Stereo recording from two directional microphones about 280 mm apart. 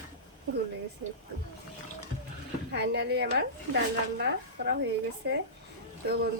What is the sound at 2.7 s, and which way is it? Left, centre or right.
A woman's voice, right.